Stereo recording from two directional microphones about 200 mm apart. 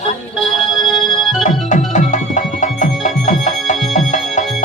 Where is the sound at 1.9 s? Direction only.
40° left (ahead or behind).